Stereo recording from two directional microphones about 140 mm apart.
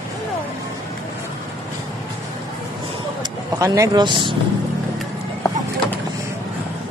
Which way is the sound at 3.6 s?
25° right (ahead or behind).